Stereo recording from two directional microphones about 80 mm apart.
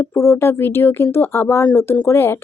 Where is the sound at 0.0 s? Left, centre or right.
Left.